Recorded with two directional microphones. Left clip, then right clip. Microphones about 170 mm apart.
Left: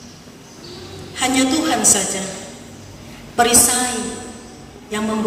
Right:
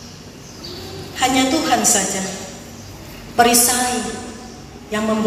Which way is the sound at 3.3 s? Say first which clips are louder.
Right 1 dB; 40° left (ahead or behind).